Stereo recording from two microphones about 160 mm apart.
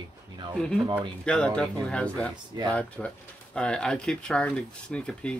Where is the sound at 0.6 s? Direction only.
Centre (ahead or behind).